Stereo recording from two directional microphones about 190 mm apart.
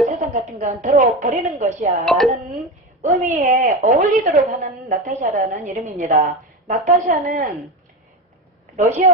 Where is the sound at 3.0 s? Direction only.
40° right (ahead or behind).